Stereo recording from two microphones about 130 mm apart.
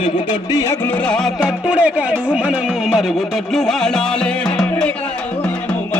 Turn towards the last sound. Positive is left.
turn(degrees=5)  # may be behind; listen again after turning